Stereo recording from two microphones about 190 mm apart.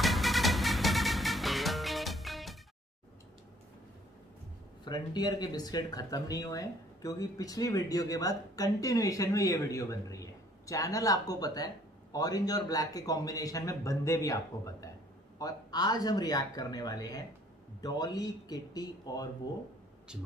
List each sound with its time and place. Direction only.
0.0 s music: centre (ahead or behind)
4.8 s speech: 20° left (ahead or behind)
20.1 s speech: 5° right (ahead or behind)